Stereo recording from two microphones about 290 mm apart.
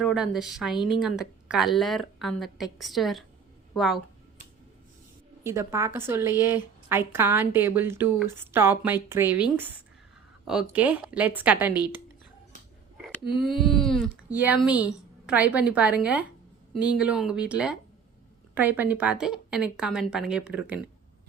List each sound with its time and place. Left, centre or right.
0.0 s speech: centre
5.4 s a woman's voice: centre
13.2 s speech: centre